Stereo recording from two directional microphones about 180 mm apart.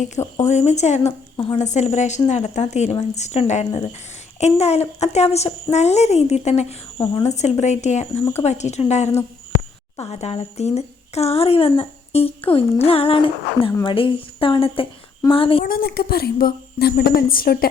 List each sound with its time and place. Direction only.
0.4 s a woman's voice: 40° left (ahead or behind)
7.0 s speech: 15° left (ahead or behind)
7.3 s a woman's voice: 40° left (ahead or behind)
15.6 s a woman's voice: 55° left (ahead or behind)